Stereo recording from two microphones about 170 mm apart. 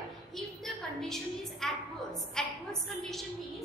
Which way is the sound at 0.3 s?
Centre (ahead or behind).